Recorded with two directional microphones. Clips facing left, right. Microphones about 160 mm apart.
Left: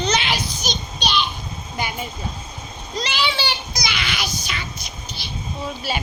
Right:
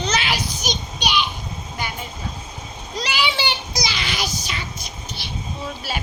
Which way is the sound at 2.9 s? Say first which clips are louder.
Even; 10° right (ahead or behind).